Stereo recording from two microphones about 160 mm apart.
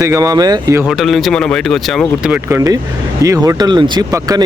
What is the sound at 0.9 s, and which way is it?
Speech, centre (ahead or behind).